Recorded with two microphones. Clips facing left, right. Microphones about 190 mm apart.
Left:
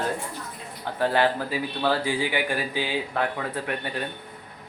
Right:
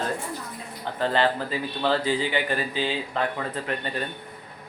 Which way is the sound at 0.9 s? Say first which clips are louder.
Left 1 dB; 10° left (ahead or behind).